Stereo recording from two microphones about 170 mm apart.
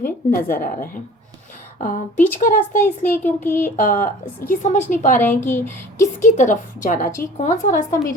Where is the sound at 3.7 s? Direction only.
50° left (ahead or behind).